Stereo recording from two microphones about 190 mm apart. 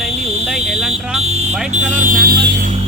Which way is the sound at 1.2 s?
35° right (ahead or behind).